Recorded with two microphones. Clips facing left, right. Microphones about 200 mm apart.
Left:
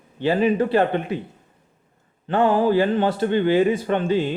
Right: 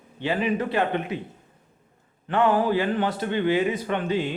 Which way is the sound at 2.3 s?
30° left (ahead or behind).